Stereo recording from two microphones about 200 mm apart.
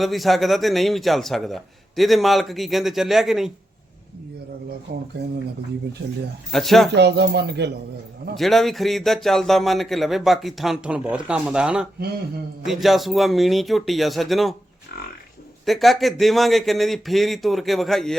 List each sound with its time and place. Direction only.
0.0 s speech: centre (ahead or behind)
6.5 s speech: centre (ahead or behind)
6.9 s speech: 55° right (ahead or behind)
8.4 s speech: centre (ahead or behind)
15.6 s speech: centre (ahead or behind)